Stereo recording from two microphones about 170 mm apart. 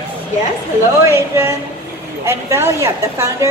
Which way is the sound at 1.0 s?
15° right (ahead or behind).